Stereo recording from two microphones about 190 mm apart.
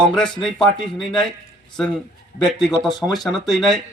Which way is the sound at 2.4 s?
Centre (ahead or behind).